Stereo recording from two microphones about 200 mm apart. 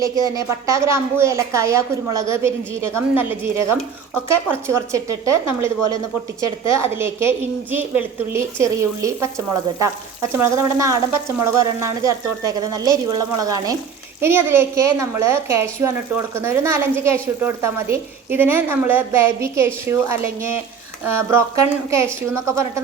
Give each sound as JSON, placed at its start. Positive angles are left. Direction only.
{"t": 0.3, "sound": "a woman's voice", "side_deg": -15}